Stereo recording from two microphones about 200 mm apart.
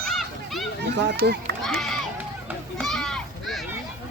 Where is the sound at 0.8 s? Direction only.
55° right (ahead or behind).